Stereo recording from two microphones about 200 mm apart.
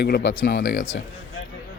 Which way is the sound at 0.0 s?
55° left (ahead or behind).